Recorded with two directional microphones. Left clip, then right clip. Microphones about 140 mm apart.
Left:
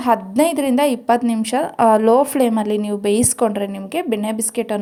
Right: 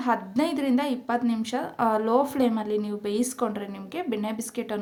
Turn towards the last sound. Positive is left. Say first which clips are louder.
# left 9 dB
turn(degrees=40)  # may be behind; listen again after turning